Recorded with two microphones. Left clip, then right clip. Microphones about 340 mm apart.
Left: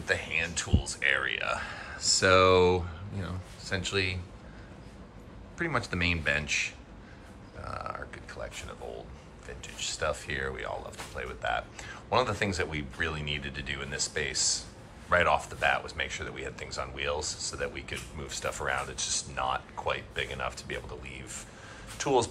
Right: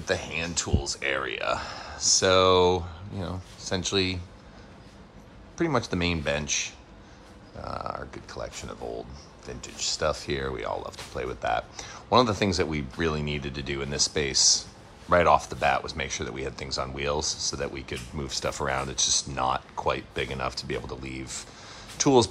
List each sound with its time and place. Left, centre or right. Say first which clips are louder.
0.0 s speech: right 1 dB; centre
5.6 s speech: right 4 dB; centre